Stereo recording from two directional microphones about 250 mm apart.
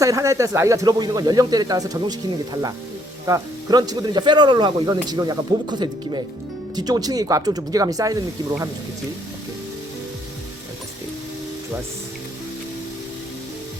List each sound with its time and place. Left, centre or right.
0.0 s speech: centre